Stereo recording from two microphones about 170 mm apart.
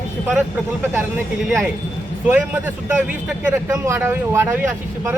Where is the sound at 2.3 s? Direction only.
10° right (ahead or behind).